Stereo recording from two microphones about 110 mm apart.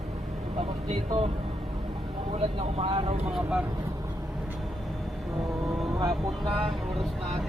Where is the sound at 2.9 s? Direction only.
50° right (ahead or behind).